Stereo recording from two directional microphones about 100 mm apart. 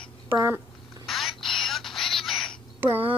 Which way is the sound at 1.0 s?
Centre (ahead or behind).